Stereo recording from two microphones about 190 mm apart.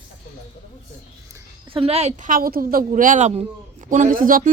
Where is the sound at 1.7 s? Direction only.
30° right (ahead or behind).